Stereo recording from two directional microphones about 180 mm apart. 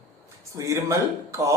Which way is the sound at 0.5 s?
15° right (ahead or behind).